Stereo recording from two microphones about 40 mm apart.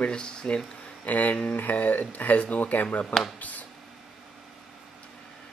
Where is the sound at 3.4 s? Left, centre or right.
Left.